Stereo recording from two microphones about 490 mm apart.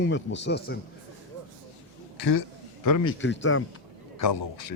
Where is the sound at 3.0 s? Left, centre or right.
Left.